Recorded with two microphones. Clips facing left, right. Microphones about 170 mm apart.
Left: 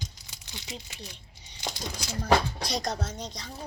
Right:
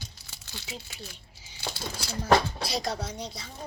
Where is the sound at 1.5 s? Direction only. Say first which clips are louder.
Even; 15° left (ahead or behind).